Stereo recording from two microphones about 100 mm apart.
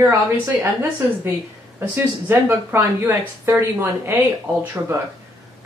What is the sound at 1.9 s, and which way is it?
Speech, 20° right (ahead or behind).